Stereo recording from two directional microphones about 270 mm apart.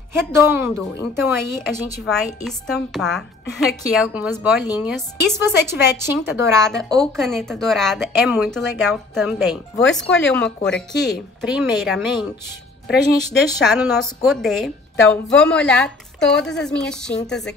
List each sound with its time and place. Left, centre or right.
0.1 s a woman's voice: centre
2.0 s a woman's voice: centre
6.6 s a woman's voice: centre
13.7 s a woman's voice: centre